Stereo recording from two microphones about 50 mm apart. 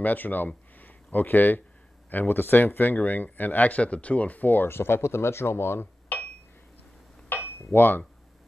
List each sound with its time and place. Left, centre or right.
0.0 s speech: left
4.6 s speech: left
6.1 s a sound: left
7.5 s speech: left